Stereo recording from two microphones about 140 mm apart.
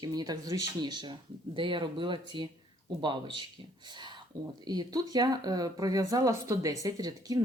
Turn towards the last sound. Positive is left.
turn(degrees=-25)  # may be behind; listen again after turning